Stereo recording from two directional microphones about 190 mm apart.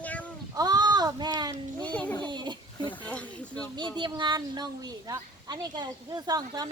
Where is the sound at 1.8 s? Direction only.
5° left (ahead or behind).